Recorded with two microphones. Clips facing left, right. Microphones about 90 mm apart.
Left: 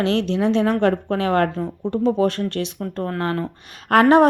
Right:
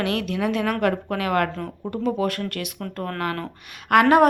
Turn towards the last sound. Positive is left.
turn(degrees=35)  # may be behind; listen again after turning